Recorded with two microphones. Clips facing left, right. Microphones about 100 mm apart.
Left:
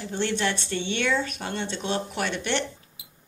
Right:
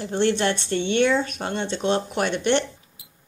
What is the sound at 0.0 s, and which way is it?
Speech, 35° right (ahead or behind).